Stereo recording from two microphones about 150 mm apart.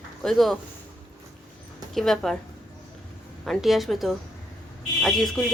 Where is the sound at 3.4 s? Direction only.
Centre (ahead or behind).